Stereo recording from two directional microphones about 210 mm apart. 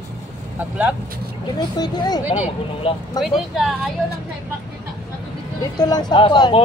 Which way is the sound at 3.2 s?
Centre (ahead or behind).